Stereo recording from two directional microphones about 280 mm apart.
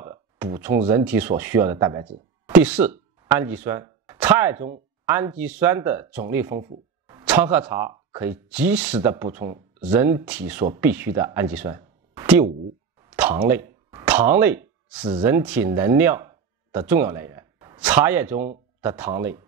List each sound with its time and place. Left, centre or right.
0.4 s speech: centre
13.0 s a sound: centre
15.0 s speech: centre